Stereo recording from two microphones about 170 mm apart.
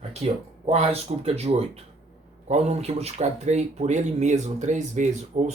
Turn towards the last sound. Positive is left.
turn(degrees=-40)  # may be behind; listen again after turning